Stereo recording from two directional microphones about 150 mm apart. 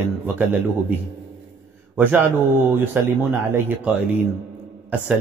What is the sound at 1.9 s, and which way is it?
A man's voice, 15° right (ahead or behind).